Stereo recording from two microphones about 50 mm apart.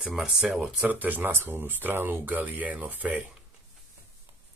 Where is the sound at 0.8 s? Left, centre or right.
Right.